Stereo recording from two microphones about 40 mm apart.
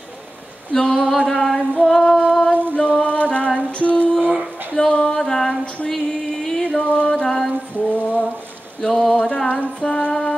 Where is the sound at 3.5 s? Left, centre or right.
Left.